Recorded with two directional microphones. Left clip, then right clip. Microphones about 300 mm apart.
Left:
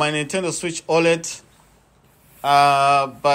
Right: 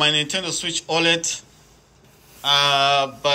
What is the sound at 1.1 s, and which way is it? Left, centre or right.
Speech, left.